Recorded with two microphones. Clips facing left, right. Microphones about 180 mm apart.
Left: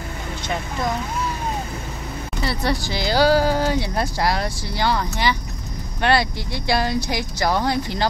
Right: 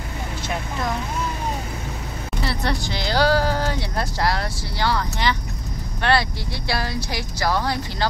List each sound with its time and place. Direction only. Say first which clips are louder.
2.4 s speech: left 2 dB; 5° left (ahead or behind); by 8.1 s 20° left (ahead or behind)